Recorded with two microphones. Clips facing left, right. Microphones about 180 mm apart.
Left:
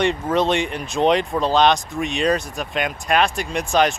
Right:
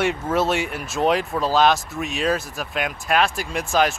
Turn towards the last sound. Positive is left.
turn(degrees=-5)  # may be behind; listen again after turning